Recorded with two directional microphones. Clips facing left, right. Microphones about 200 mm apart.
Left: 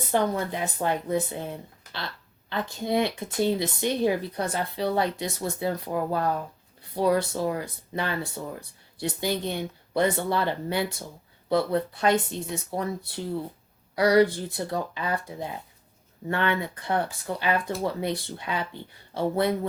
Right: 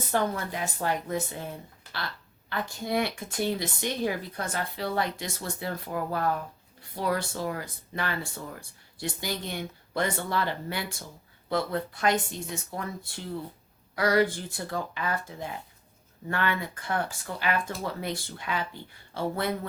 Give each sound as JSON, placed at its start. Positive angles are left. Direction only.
{"t": 0.1, "sound": "speech", "side_deg": 20}
{"t": 13.9, "sound": "speech", "side_deg": 20}